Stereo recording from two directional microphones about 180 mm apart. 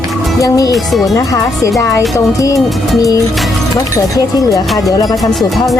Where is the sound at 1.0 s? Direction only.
20° left (ahead or behind).